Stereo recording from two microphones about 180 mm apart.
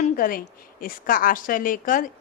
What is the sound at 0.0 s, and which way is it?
A woman's voice, 55° left (ahead or behind).